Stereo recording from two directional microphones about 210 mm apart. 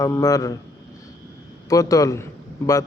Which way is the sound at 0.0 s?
15° left (ahead or behind).